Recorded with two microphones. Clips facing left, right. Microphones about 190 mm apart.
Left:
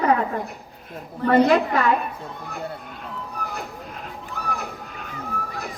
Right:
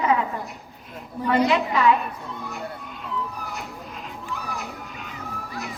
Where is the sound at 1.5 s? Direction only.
50° left (ahead or behind).